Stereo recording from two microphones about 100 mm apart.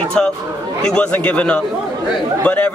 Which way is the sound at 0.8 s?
10° left (ahead or behind).